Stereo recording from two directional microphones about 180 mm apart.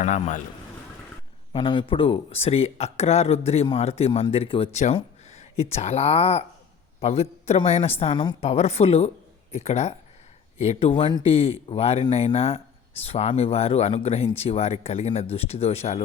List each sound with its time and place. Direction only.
0.0 s a man's voice: 45° left (ahead or behind)
1.5 s speech: 30° left (ahead or behind)